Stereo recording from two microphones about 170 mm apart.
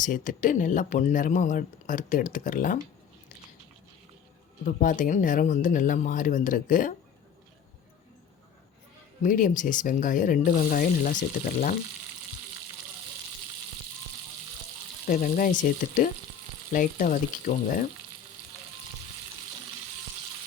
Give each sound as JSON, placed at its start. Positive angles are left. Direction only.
{"t": 0.0, "sound": "speech", "side_deg": 50}
{"t": 4.6, "sound": "speech", "side_deg": 50}
{"t": 9.2, "sound": "speech", "side_deg": 50}
{"t": 15.0, "sound": "speech", "side_deg": 55}